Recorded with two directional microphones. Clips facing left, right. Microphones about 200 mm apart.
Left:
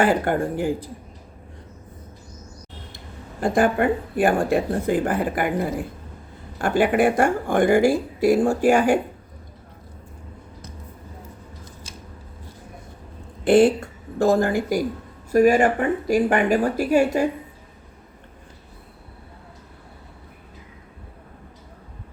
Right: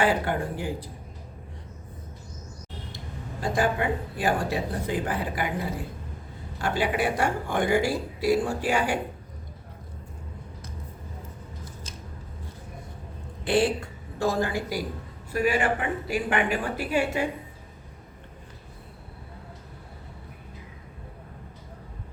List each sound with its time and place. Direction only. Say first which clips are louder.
0.0 s speech: left 5 dB; 50° left (ahead or behind)
3.4 s speech: left 7 dB; 55° left (ahead or behind)
13.4 s a woman's voice: left 8 dB; 50° left (ahead or behind)